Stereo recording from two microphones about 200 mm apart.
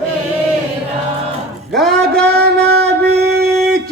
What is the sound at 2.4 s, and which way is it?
Music, 55° right (ahead or behind).